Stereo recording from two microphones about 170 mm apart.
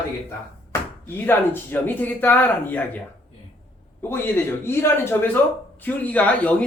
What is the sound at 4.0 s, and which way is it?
Speech, 15° left (ahead or behind).